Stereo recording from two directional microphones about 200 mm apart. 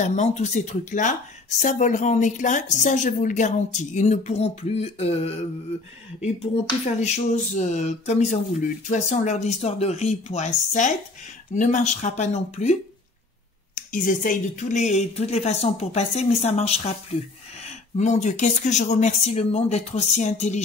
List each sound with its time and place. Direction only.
0.0 s a woman's voice: 35° left (ahead or behind)
13.7 s a woman's voice: 40° left (ahead or behind)